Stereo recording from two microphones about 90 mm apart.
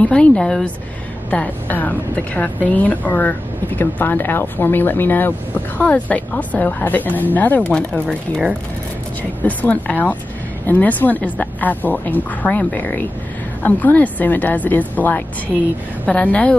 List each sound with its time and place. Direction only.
0.0 s a woman's voice: 10° left (ahead or behind)
9.4 s a woman's voice: 15° left (ahead or behind)